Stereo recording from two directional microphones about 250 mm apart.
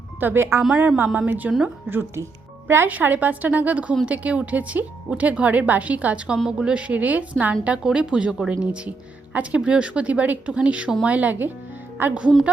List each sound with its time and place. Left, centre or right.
0.2 s a woman's voice: centre